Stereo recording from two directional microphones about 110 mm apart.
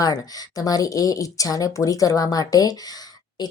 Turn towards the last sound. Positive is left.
turn(degrees=35)  # may be behind; listen again after turning